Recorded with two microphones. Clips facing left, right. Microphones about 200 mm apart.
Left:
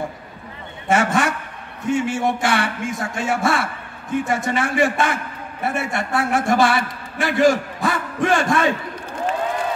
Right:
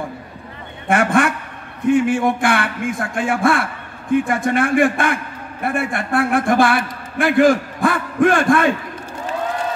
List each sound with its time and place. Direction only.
0.8 s a man's voice: 55° right (ahead or behind)